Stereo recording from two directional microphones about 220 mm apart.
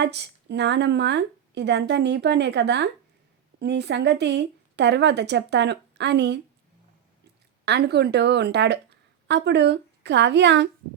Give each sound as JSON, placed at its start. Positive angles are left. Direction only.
{"t": 0.0, "sound": "speech", "side_deg": -50}
{"t": 7.6, "sound": "speech", "side_deg": -50}